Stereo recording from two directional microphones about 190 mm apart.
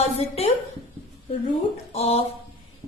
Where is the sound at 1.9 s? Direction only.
30° left (ahead or behind).